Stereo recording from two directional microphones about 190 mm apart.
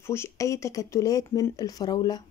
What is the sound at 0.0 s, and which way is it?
Speech, 15° left (ahead or behind).